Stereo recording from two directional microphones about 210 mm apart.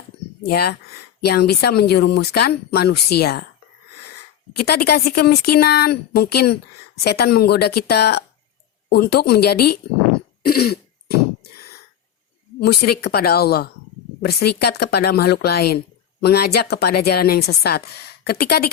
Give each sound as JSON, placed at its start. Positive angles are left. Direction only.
{"t": 0.4, "sound": "speech", "side_deg": 50}
{"t": 4.6, "sound": "speech", "side_deg": 50}
{"t": 12.5, "sound": "speech", "side_deg": 50}